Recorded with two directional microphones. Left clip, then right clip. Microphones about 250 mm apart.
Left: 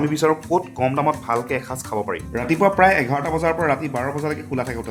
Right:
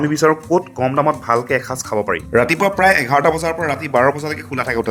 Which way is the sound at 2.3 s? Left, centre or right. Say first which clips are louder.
Right 3 dB; right.